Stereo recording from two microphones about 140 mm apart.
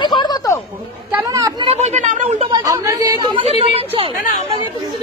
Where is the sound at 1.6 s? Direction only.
45° right (ahead or behind).